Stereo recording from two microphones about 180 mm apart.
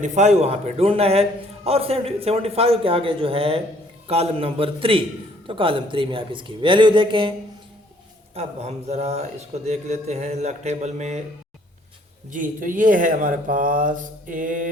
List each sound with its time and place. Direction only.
0.0 s a man's voice: 40° right (ahead or behind)
8.4 s a man's voice: 35° right (ahead or behind)
12.3 s speech: 45° right (ahead or behind)